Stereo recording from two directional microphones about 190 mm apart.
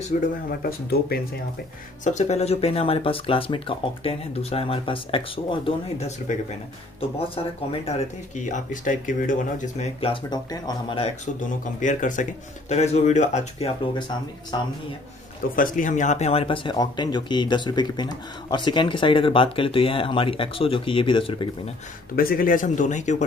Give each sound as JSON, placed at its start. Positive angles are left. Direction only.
{"t": 0.1, "sound": "speech", "side_deg": 45}
{"t": 2.0, "sound": "speech", "side_deg": 35}
{"t": 8.4, "sound": "speech", "side_deg": 40}
{"t": 9.9, "sound": "speech", "side_deg": 25}
{"t": 11.6, "sound": "speech", "side_deg": 40}
{"t": 15.5, "sound": "speech", "side_deg": 45}
{"t": 22.1, "sound": "speech", "side_deg": 50}